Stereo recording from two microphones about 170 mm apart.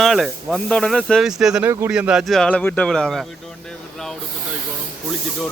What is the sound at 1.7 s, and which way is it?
Speech, 15° right (ahead or behind).